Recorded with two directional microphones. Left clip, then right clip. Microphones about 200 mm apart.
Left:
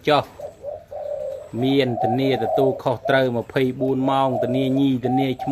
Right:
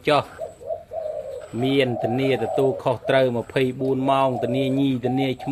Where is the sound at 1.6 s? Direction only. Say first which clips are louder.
Left 1 dB; 10° left (ahead or behind).